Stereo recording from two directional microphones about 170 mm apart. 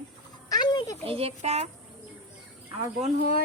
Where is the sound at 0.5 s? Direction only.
25° left (ahead or behind).